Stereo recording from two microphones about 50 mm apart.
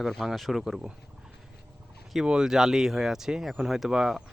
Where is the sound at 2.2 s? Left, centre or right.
Centre.